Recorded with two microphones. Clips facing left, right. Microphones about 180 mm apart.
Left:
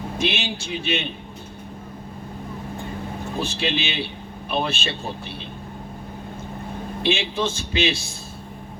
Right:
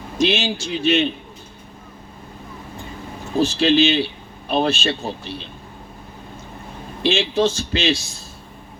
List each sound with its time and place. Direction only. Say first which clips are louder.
0.2 s speech: right 7 dB; 55° left (ahead or behind)
3.4 s speech: right 12 dB; 55° left (ahead or behind)
7.0 s speech: right 5 dB; 55° left (ahead or behind)